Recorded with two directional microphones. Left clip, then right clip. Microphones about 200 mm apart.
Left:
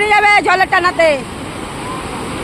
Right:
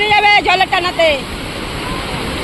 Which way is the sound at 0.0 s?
25° left (ahead or behind).